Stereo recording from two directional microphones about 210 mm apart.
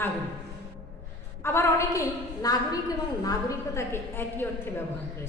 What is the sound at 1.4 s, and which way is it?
A woman's voice, 15° left (ahead or behind).